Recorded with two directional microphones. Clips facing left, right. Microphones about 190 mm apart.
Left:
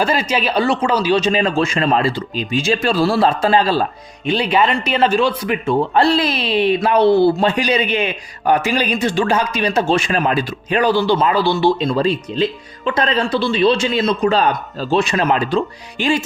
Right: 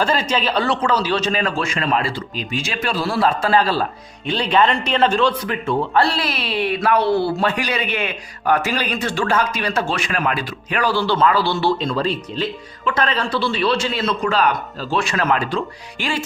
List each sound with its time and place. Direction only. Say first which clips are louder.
0.0 s a man's voice: left 2 dB; 10° left (ahead or behind)
4.3 s a man's voice: left 1 dB; 10° left (ahead or behind)
14.3 s a man's voice: left 2 dB; 30° left (ahead or behind)